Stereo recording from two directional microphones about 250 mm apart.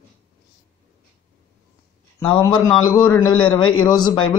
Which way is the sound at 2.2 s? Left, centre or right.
Centre.